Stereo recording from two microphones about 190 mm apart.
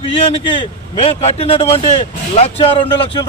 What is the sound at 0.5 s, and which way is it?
A man's voice, 25° left (ahead or behind).